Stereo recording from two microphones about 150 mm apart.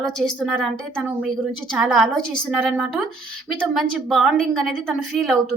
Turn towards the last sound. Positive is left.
turn(degrees=0)  # may be behind; listen again after turning